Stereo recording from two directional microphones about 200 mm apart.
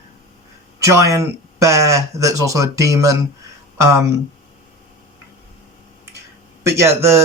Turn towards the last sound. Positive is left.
turn(degrees=-15)  # may be behind; listen again after turning